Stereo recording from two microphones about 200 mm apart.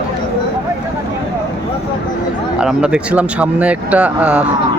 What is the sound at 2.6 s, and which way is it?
Speech, 5° right (ahead or behind).